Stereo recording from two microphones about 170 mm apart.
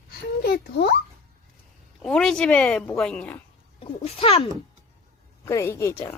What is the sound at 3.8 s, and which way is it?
Speech, 35° left (ahead or behind).